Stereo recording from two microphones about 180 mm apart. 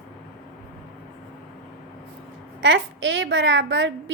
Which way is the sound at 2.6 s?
90° right.